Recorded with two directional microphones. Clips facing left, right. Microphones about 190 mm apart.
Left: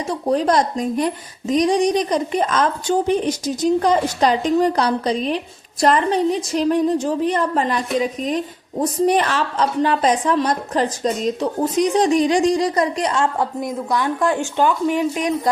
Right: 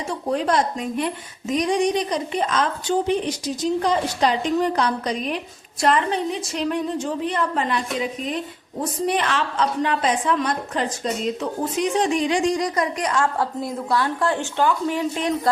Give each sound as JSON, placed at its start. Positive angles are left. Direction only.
{"t": 0.1, "sound": "a woman's voice", "side_deg": 40}
{"t": 8.8, "sound": "a woman's voice", "side_deg": 40}